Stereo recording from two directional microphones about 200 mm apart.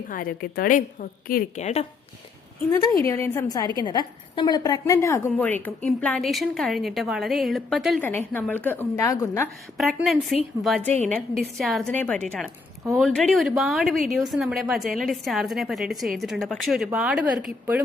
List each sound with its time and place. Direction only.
0.1 s a woman's voice: 45° left (ahead or behind)
3.0 s a woman's voice: 15° left (ahead or behind)
8.0 s a woman's voice: 10° left (ahead or behind)
9.7 s a woman's voice: centre (ahead or behind)